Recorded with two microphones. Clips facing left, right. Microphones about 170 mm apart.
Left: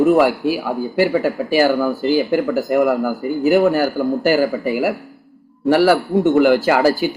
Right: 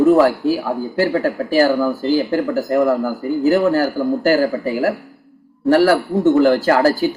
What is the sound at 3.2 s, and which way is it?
Speech, 20° left (ahead or behind).